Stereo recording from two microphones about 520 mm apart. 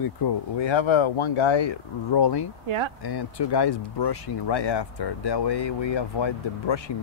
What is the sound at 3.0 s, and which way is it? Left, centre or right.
Speech, left.